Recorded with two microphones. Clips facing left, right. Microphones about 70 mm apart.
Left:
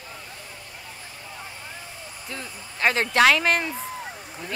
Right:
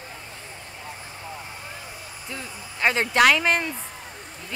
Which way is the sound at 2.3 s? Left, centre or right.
Centre.